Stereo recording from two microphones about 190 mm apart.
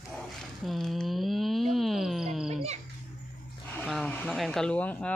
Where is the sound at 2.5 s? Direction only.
35° right (ahead or behind).